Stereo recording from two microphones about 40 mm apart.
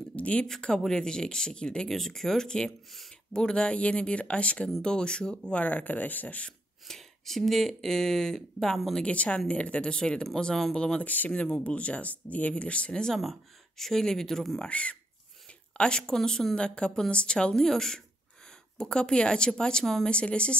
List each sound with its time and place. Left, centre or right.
0.1 s a sound: left
0.8 s speech: centre
1.9 s speech: centre; by 4.6 s left
4.8 s speech: left
5.5 s speech: left
6.9 s speech: centre
9.0 s speech: left
11.0 s speech: left
11.4 s speech: left
13.2 s speech: centre
14.6 s speech: left; by 16.5 s centre
16.5 s speech: left
18.9 s speech: left
20.1 s speech: left